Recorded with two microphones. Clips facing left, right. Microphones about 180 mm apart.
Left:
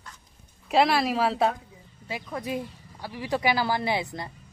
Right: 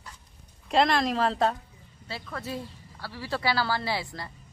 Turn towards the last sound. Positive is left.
turn(degrees=20)  # may be behind; listen again after turning